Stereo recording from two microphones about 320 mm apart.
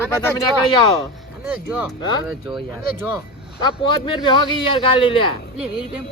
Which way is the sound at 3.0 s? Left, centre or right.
Centre.